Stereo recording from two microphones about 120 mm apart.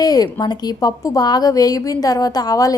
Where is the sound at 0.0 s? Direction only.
30° left (ahead or behind).